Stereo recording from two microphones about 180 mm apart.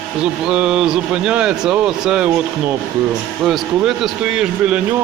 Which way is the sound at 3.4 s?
Centre (ahead or behind).